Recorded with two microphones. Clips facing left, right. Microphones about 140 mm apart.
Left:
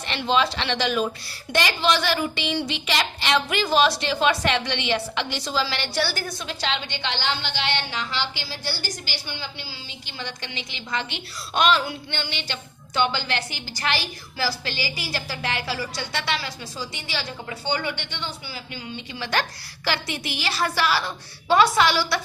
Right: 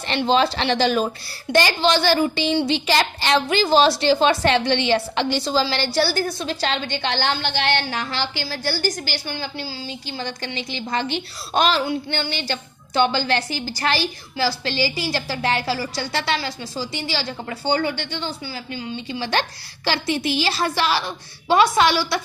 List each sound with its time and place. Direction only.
0.1 s a woman's voice: 35° right (ahead or behind)
10.1 s a woman's voice: 35° right (ahead or behind)